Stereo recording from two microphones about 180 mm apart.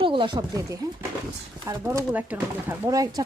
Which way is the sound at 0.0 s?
30° right (ahead or behind).